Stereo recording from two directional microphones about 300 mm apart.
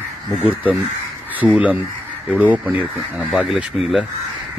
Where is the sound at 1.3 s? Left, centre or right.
Centre.